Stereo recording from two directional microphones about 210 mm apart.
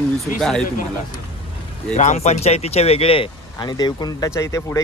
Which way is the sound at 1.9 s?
35° left (ahead or behind).